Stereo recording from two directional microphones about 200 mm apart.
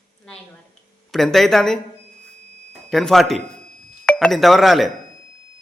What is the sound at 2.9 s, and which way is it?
Speech, centre (ahead or behind).